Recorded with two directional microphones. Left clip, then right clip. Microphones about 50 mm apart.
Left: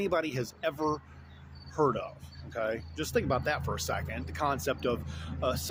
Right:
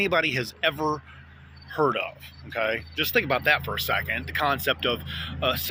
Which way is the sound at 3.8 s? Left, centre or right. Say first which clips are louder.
Right 8 dB; left.